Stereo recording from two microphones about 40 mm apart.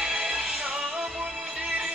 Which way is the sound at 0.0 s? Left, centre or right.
Right.